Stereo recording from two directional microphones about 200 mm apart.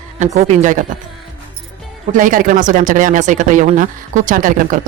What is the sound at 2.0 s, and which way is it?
Speech, 40° right (ahead or behind).